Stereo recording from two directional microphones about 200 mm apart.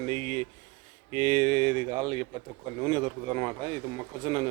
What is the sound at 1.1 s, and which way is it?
Speech, 30° right (ahead or behind).